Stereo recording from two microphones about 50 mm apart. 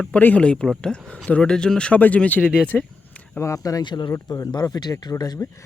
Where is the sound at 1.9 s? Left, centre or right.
Left.